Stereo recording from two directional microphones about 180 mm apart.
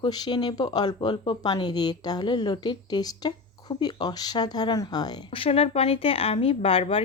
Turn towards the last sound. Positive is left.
turn(degrees=30)  # may be behind; listen again after turning